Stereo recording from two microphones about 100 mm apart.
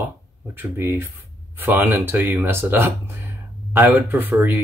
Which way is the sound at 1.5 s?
20° right (ahead or behind).